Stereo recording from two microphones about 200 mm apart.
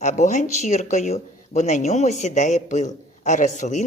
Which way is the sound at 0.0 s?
35° left (ahead or behind).